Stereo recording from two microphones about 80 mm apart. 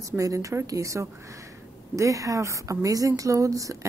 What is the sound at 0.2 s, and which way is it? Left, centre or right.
A woman's voice, right.